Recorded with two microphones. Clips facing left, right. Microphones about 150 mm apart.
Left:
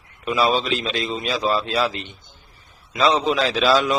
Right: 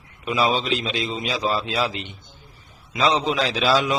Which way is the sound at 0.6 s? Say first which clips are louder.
Left 1 dB; 15° right (ahead or behind).